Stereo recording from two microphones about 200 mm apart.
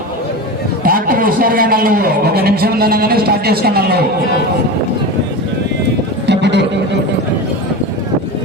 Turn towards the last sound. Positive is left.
turn(degrees=-60)  # may be behind; listen again after turning